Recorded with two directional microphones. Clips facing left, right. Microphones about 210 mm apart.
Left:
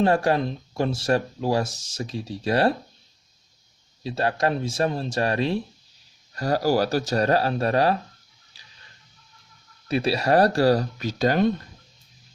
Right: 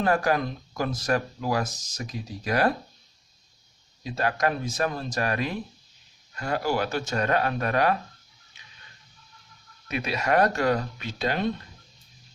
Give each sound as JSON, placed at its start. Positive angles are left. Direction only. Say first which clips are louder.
{"t": 0.0, "sound": "speech", "louder": "left 3 dB", "side_deg": 30}
{"t": 4.0, "sound": "speech", "louder": "left 2 dB", "side_deg": 30}
{"t": 8.5, "sound": "a sound", "louder": "right 1 dB", "side_deg": 35}
{"t": 9.9, "sound": "speech", "louder": "left 5 dB", "side_deg": 30}